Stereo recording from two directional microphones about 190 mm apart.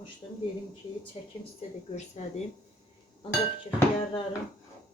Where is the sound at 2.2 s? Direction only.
40° left (ahead or behind).